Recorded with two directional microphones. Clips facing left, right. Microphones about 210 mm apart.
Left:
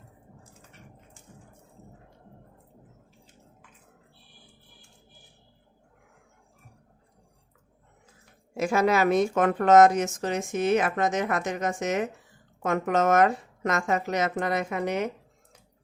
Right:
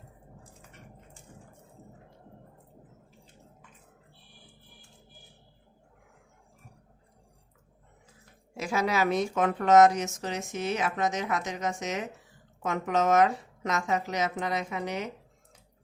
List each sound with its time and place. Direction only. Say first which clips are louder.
8.5 s a woman's voice: left 5 dB; 50° left (ahead or behind)